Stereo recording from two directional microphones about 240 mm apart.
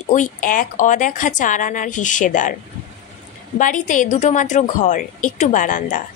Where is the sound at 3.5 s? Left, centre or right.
Left.